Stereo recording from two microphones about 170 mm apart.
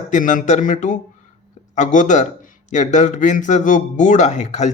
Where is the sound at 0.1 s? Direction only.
50° left (ahead or behind).